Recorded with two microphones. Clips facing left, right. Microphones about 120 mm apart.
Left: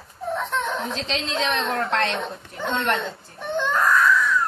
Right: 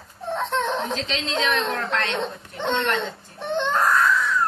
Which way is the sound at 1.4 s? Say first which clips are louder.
Left 1 dB; 35° left (ahead or behind).